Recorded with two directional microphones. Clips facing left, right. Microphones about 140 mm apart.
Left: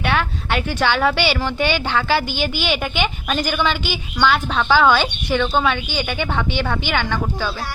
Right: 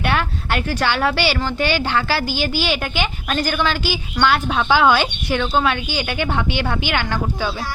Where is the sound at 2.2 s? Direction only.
55° left (ahead or behind).